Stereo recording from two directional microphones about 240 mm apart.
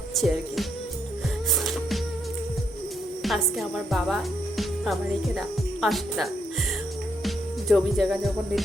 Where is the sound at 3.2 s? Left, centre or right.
Centre.